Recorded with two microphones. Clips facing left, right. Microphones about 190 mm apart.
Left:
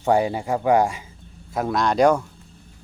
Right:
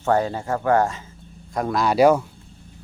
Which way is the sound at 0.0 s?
15° left (ahead or behind).